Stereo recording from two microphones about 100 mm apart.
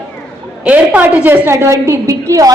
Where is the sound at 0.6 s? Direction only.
15° right (ahead or behind); by 2.5 s 35° right (ahead or behind).